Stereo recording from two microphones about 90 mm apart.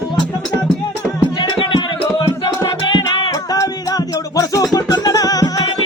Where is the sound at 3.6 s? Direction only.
40° left (ahead or behind).